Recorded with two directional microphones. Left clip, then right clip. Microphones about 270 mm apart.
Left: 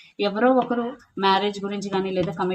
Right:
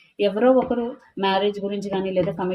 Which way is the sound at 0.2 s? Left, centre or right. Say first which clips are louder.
Right 2 dB; centre.